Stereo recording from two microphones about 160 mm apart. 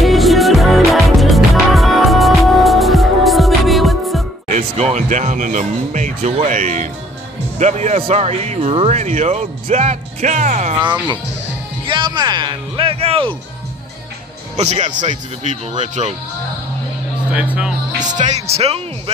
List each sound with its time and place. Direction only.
0.0 s music: centre (ahead or behind)
4.5 s speech: 45° right (ahead or behind)
11.8 s music: 30° right (ahead or behind)
14.6 s speech: 45° right (ahead or behind)
17.3 s speech: 5° right (ahead or behind)
18.0 s speech: 50° right (ahead or behind)